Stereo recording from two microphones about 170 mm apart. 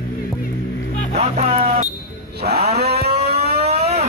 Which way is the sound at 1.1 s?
40° right (ahead or behind).